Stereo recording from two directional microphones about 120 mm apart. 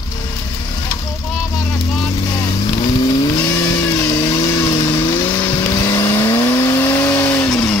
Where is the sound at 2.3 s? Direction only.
25° left (ahead or behind).